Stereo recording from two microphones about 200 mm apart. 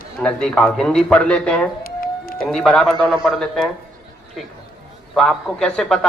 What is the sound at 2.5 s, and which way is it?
A man's voice, 5° left (ahead or behind).